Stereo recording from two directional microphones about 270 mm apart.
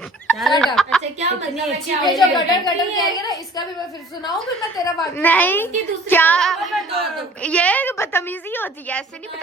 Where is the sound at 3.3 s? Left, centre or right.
Centre.